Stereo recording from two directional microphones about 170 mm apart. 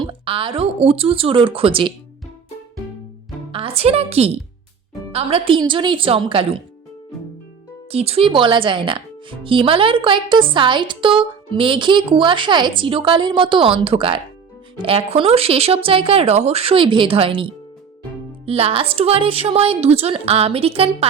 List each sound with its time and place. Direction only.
0.0 s speech: 30° right (ahead or behind)
3.5 s a woman's voice: 35° right (ahead or behind)
7.9 s speech: 35° right (ahead or behind)